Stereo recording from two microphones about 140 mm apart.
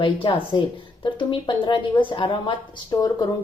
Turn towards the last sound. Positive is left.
turn(degrees=30)  # may be behind; listen again after turning